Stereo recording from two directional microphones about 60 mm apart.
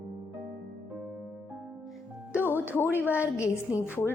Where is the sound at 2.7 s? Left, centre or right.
Left.